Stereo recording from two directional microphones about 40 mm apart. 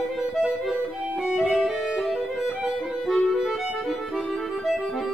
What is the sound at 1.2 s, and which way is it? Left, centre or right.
Music, centre.